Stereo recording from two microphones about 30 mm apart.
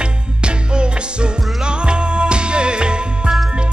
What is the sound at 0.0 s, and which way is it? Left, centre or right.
Music, right.